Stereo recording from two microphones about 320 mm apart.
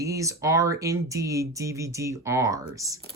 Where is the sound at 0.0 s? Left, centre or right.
Centre.